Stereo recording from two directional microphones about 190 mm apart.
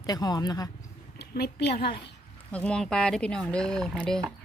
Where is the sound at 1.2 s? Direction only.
60° left (ahead or behind).